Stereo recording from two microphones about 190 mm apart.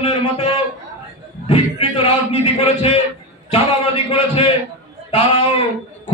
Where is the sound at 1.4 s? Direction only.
30° left (ahead or behind).